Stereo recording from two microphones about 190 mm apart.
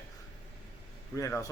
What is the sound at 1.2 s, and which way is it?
Speech, 15° left (ahead or behind).